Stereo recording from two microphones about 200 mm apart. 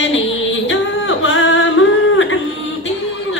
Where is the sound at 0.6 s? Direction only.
70° left (ahead or behind).